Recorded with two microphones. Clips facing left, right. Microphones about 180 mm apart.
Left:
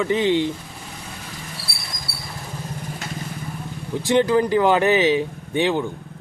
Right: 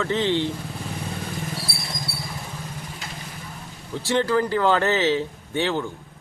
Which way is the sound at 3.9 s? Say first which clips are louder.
Left 4 dB; 15° left (ahead or behind).